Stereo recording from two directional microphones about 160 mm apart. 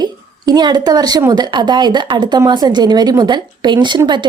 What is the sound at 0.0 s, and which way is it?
Speech, 25° right (ahead or behind).